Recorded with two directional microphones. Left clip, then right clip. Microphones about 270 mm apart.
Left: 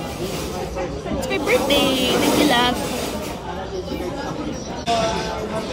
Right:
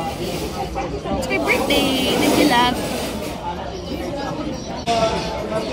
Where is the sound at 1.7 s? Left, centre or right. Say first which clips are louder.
Even; centre.